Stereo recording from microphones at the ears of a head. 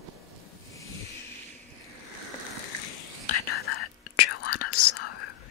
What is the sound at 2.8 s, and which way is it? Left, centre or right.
Whispering, left.